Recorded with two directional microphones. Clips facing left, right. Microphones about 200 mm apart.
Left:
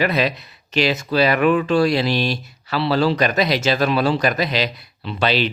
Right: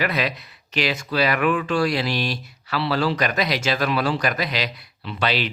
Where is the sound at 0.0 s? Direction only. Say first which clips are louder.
Left 5 dB; 25° left (ahead or behind).